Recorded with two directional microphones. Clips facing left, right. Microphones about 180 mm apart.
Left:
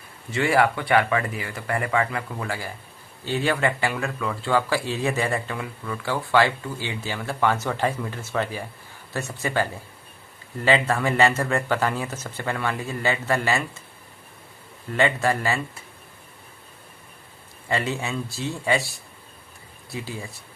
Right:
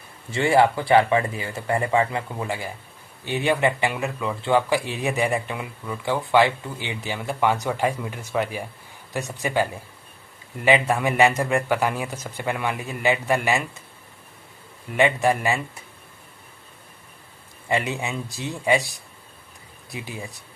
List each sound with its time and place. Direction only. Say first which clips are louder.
0.3 s speech: right 2 dB; 30° right (ahead or behind)
14.9 s speech: right 2 dB; 15° right (ahead or behind)
17.7 s speech: right 1 dB; 15° right (ahead or behind)